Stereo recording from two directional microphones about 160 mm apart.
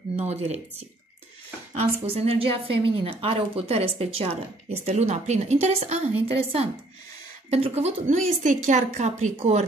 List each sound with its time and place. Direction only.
0.1 s a woman's voice: 40° right (ahead or behind)